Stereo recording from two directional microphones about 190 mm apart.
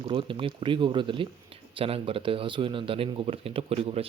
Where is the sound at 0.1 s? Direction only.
25° right (ahead or behind).